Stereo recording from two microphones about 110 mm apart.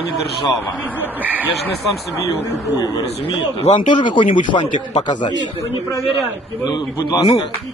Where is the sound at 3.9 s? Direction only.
45° left (ahead or behind).